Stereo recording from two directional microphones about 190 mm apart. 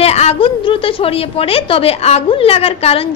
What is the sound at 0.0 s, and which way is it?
A woman's voice, 35° left (ahead or behind).